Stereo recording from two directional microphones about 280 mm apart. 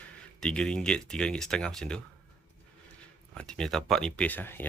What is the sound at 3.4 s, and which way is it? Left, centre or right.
Speech, centre.